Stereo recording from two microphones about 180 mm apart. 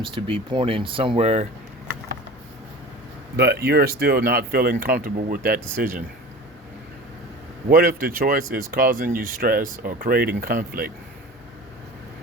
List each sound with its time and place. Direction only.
0.0 s speech: 30° right (ahead or behind)
3.3 s speech: 70° right (ahead or behind)
7.7 s speech: 50° right (ahead or behind)